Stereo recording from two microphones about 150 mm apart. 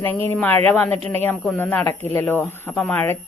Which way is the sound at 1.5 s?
15° left (ahead or behind).